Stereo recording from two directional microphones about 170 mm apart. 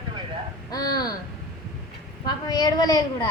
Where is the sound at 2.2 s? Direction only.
25° left (ahead or behind).